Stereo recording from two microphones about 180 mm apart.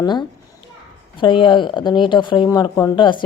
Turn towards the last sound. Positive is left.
turn(degrees=25)  # may be behind; listen again after turning